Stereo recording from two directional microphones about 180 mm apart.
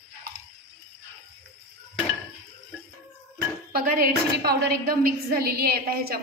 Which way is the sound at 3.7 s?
55° right (ahead or behind).